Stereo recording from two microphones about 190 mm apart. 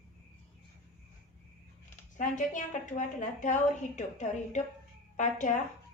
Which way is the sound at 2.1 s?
40° left (ahead or behind).